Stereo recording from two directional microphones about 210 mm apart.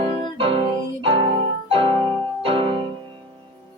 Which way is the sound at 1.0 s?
25° right (ahead or behind).